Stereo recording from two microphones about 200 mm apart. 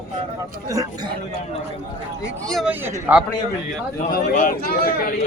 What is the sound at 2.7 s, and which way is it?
Speech, 10° right (ahead or behind).